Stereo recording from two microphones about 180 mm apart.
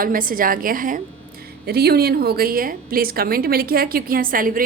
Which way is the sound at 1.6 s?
60° right (ahead or behind).